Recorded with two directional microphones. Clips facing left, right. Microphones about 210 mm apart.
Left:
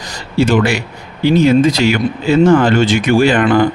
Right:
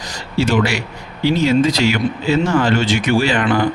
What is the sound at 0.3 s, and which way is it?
Speech, 50° left (ahead or behind).